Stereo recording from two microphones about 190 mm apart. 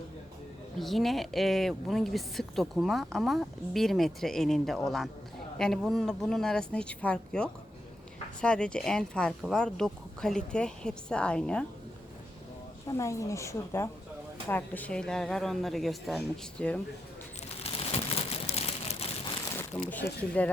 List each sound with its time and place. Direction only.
0.8 s a woman's voice: centre (ahead or behind)
12.9 s a woman's voice: 15° left (ahead or behind)
17.6 s crumpling: 30° left (ahead or behind)
18.4 s a sound: 35° left (ahead or behind)
19.7 s a woman's voice: 10° left (ahead or behind)